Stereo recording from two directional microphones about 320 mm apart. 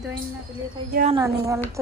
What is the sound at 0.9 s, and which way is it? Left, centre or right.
Speech, right.